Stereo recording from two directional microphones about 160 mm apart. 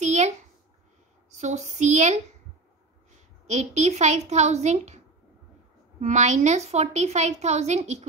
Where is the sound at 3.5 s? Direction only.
45° right (ahead or behind).